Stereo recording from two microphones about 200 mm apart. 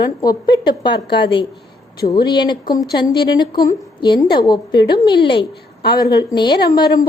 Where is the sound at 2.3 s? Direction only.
20° left (ahead or behind).